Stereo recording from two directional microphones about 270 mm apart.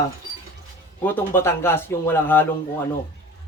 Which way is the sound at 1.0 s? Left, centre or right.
Centre.